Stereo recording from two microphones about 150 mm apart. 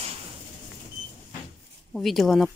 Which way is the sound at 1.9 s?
Centre (ahead or behind).